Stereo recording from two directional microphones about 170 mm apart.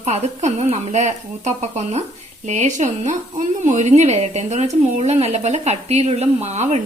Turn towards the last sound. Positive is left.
turn(degrees=-40)  # may be behind; listen again after turning